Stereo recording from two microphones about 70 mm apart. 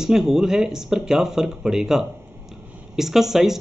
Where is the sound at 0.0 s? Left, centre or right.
Centre.